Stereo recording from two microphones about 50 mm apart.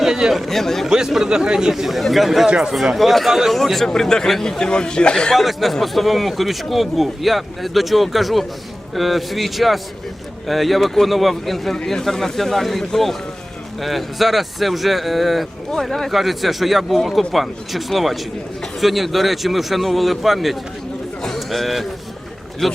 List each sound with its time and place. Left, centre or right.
0.0 s speech: centre
0.4 s speech: centre
0.9 s a man's voice: centre
5.3 s speech: centre
21.2 s a sound: centre
22.6 s speech: centre